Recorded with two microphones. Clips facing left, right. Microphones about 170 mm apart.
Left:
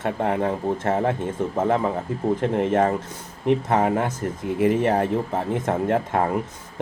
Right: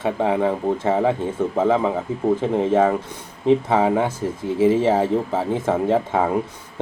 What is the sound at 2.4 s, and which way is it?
Speech, 10° right (ahead or behind).